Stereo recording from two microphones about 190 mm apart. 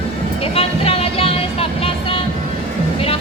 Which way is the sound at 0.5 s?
30° left (ahead or behind).